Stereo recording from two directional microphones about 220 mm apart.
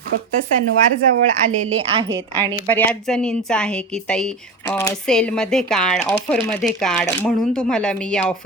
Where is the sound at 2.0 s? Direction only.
60° right (ahead or behind).